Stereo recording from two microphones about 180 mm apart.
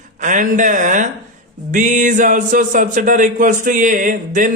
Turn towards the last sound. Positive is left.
turn(degrees=-45)  # may be behind; listen again after turning